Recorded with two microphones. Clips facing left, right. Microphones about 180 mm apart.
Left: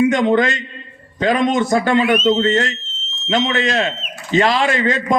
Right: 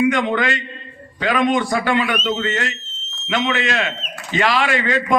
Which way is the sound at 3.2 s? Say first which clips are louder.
Left 3 dB; 40° left (ahead or behind).